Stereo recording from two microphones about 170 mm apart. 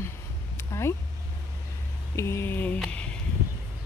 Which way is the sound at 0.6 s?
15° left (ahead or behind).